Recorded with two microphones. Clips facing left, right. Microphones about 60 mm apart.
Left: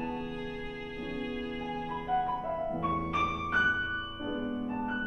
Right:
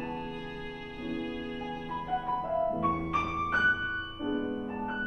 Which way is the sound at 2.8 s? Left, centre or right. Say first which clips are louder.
Right 2 dB; centre.